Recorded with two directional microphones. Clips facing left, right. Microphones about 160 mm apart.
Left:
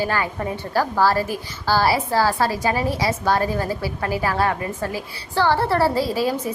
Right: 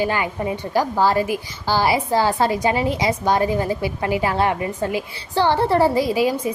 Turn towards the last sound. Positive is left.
turn(degrees=-15)  # may be behind; listen again after turning